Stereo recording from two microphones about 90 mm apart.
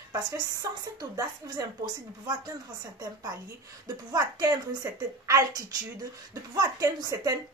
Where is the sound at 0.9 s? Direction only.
50° right (ahead or behind).